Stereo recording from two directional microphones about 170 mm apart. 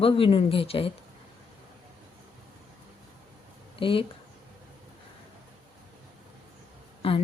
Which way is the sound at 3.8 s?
30° left (ahead or behind).